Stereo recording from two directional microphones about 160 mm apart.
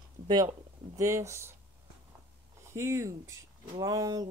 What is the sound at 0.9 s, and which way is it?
Speech, 20° right (ahead or behind).